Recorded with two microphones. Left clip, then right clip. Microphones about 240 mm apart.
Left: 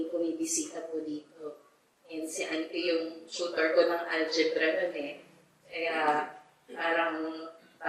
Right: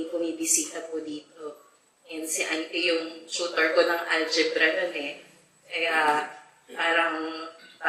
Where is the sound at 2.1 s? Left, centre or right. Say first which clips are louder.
Right 5 dB; centre.